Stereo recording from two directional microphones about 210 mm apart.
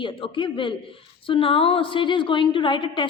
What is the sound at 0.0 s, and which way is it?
A man's voice, 25° left (ahead or behind).